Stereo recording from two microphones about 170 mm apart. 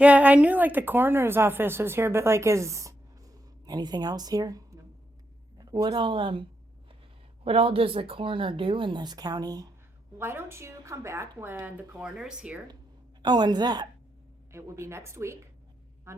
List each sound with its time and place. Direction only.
0.0 s a woman's voice: 5° right (ahead or behind)
13.2 s a woman's voice: 25° right (ahead or behind)